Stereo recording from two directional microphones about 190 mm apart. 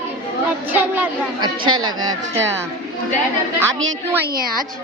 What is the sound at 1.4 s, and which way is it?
A woman's voice, 25° right (ahead or behind).